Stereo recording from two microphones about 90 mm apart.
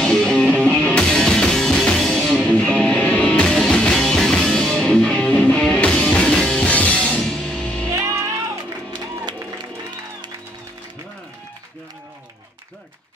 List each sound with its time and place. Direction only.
0.0 s music: 5° left (ahead or behind)
7.9 s music: 35° right (ahead or behind)